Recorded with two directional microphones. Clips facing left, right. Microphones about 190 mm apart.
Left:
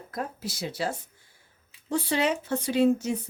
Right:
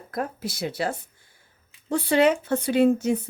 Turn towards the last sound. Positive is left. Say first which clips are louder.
# right 3 dB
turn(degrees=-55)  # may be behind; listen again after turning